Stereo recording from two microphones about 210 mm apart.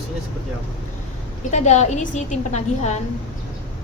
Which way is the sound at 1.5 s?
35° left (ahead or behind).